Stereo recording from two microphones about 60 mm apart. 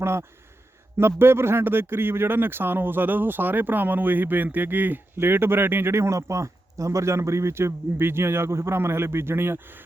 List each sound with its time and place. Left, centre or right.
0.0 s a man's voice: right